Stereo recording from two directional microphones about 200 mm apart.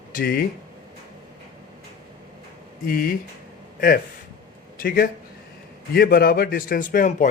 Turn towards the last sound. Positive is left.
turn(degrees=40)  # may be behind; listen again after turning